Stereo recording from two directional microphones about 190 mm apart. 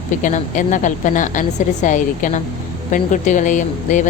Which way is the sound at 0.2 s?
40° left (ahead or behind).